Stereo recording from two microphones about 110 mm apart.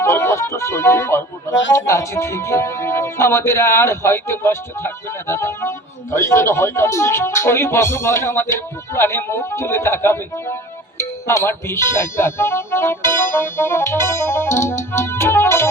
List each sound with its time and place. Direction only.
0.0 s speech: 25° left (ahead or behind)